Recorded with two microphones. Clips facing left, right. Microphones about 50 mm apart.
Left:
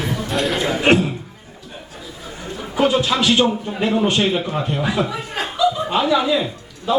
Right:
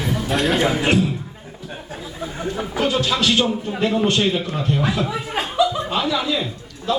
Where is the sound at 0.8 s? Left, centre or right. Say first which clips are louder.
Left 8 dB; left.